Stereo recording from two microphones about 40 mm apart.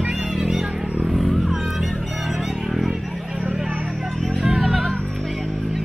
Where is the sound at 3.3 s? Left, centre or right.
Right.